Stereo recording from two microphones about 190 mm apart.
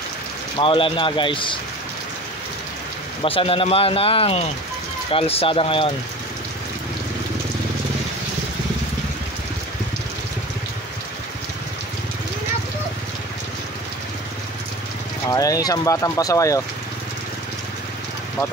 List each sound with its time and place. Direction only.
0.6 s speech: 25° left (ahead or behind)
3.2 s speech: 30° left (ahead or behind)
15.3 s speech: 20° left (ahead or behind)